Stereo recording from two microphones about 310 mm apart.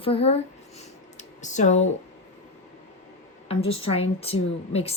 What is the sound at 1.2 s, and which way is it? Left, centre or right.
Computer keyboard, left.